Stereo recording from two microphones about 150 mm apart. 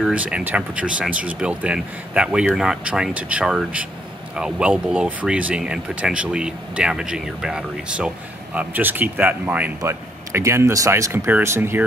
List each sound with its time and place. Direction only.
0.0 s speech: 10° right (ahead or behind)